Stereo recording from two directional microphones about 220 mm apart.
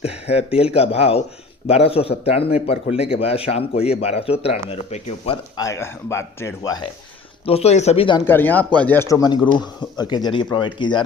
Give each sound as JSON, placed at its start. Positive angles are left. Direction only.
{"t": 0.0, "sound": "speech", "side_deg": 30}
{"t": 5.6, "sound": "speech", "side_deg": 10}
{"t": 8.3, "sound": "speech", "side_deg": 10}